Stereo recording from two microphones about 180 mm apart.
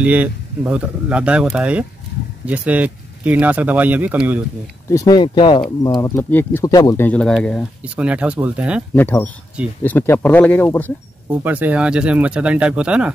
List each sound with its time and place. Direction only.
0.0 s speech: 10° right (ahead or behind)
4.8 s speech: 20° left (ahead or behind)
5.9 s speech: 15° left (ahead or behind)
7.1 s speech: 5° left (ahead or behind)
7.8 s speech: 5° right (ahead or behind)
8.9 s speech: 10° left (ahead or behind)
11.2 s speech: 10° right (ahead or behind)